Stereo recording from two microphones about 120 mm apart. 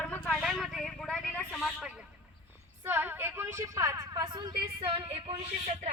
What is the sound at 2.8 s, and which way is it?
A woman's voice, 20° right (ahead or behind).